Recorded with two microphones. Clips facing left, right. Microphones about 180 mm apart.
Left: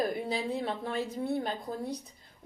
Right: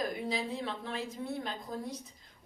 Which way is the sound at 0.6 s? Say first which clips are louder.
Left 5 dB; 45° left (ahead or behind).